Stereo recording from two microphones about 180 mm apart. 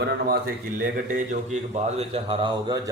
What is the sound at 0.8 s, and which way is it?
A man's voice, 45° right (ahead or behind).